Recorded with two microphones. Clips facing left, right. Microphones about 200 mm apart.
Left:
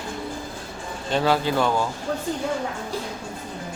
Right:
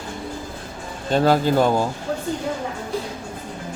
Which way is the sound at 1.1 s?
45° right (ahead or behind).